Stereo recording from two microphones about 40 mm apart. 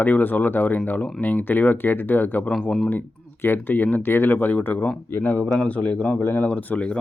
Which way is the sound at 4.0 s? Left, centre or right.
Left.